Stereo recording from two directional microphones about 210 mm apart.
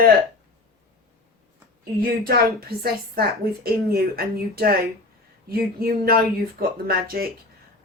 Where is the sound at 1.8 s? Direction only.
45° right (ahead or behind).